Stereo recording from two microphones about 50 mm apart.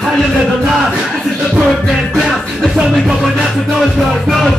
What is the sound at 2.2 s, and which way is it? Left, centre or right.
Music, centre.